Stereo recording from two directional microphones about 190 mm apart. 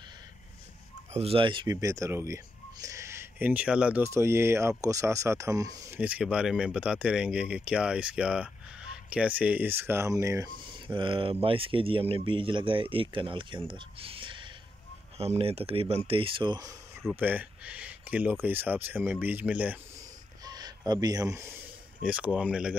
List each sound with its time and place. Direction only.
1.1 s speech: 30° right (ahead or behind)
5.9 s speech: 5° right (ahead or behind); by 16.7 s 20° right (ahead or behind)
17.1 s speech: 10° right (ahead or behind)
20.4 s a sound: 20° right (ahead or behind)
22.0 s speech: 5° right (ahead or behind)